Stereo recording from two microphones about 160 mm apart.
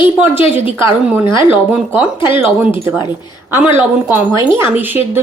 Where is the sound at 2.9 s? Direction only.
25° left (ahead or behind).